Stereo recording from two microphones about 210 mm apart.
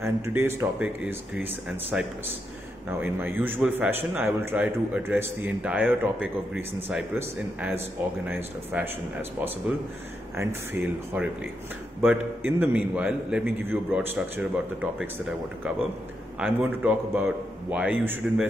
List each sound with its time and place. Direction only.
0.0 s a man's voice: 10° right (ahead or behind)
10.3 s a man's voice: 10° right (ahead or behind)
16.3 s a man's voice: 5° right (ahead or behind)